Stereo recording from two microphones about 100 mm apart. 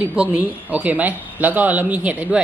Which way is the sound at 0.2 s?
15° right (ahead or behind).